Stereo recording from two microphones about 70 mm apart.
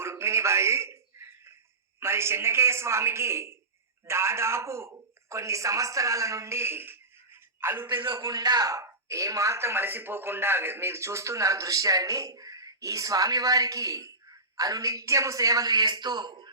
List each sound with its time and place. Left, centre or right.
0.0 s a sound: right
2.0 s a man's voice: right
8.1 s speech: right